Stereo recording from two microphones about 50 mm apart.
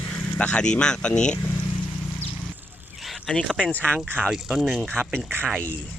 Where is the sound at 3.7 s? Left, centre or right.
Left.